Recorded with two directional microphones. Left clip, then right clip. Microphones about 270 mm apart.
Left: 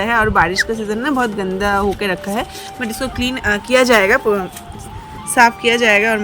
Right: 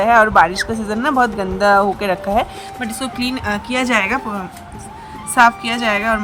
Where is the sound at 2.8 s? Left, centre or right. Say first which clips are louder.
Left 2 dB; centre.